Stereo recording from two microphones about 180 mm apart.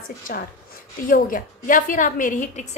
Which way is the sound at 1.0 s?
50° left (ahead or behind).